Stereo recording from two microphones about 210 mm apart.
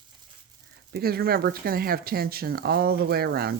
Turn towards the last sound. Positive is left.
turn(degrees=-50)  # may be behind; listen again after turning